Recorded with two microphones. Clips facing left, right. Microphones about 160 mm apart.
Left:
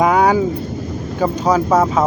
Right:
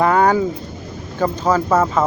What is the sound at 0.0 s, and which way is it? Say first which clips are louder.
Vehicle: left 1 dB; 10° left (ahead or behind).